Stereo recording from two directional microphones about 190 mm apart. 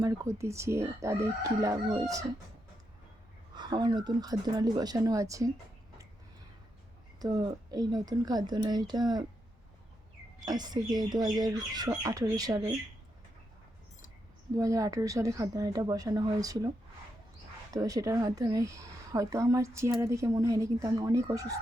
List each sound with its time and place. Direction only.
0.0 s speech: 15° right (ahead or behind)
3.5 s speech: 20° right (ahead or behind)
7.2 s speech: 20° right (ahead or behind)
10.4 s speech: 20° right (ahead or behind)
14.5 s speech: 15° right (ahead or behind)
17.7 s speech: 20° right (ahead or behind)